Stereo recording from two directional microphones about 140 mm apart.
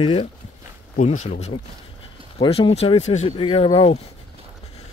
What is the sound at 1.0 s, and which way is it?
Speech, 55° left (ahead or behind).